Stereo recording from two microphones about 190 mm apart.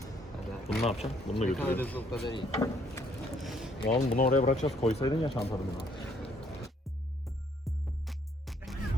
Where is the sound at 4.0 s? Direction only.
45° left (ahead or behind).